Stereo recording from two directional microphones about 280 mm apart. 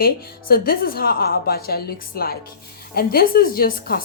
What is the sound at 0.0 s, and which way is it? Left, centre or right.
A woman's voice, left.